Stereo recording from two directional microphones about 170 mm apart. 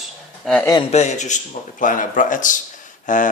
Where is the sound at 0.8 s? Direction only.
40° left (ahead or behind).